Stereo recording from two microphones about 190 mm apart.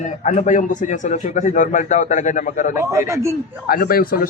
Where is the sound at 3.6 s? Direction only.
50° left (ahead or behind).